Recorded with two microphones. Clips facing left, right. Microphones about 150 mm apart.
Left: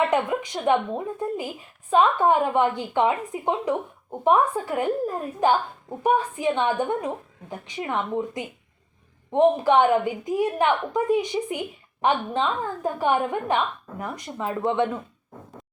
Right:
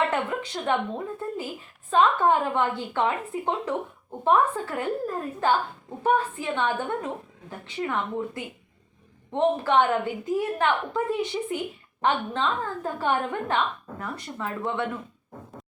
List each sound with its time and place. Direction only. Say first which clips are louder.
0.1 s a woman's voice: left 4 dB; 15° left (ahead or behind)